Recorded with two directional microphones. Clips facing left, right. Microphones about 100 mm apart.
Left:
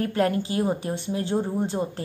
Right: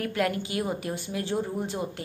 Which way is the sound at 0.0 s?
30° left (ahead or behind).